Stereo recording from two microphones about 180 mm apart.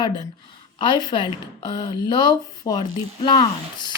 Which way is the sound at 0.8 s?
25° left (ahead or behind).